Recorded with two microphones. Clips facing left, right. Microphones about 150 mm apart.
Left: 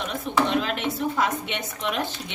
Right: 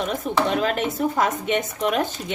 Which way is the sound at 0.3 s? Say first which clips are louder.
Right 1 dB; 45° right (ahead or behind).